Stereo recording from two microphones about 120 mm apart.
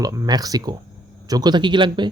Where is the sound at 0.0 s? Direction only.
30° right (ahead or behind).